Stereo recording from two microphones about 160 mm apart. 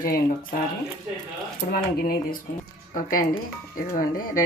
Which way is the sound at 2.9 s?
60° left (ahead or behind).